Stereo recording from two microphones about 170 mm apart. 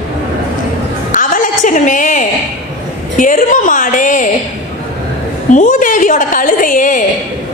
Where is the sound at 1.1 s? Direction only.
50° left (ahead or behind).